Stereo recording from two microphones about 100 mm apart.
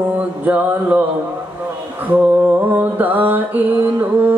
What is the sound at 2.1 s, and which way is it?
Mantra, 10° right (ahead or behind).